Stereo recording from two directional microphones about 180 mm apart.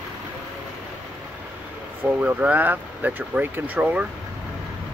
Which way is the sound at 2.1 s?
10° right (ahead or behind).